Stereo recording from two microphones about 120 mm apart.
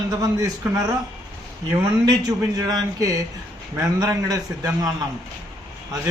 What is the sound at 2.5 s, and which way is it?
A man's voice, 30° right (ahead or behind).